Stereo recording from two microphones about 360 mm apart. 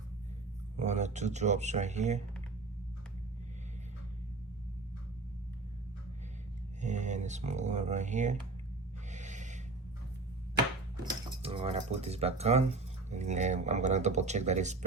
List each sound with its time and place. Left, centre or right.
0.8 s speech: centre
6.8 s speech: centre
9.1 s a sound: centre
11.1 s speech: centre